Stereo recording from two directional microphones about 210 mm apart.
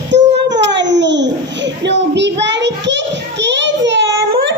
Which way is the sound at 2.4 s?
55° right (ahead or behind).